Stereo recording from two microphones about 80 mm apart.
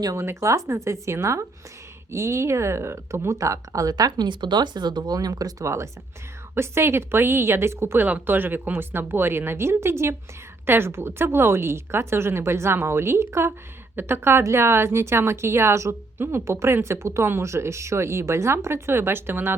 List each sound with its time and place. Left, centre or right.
0.0 s a woman's voice: right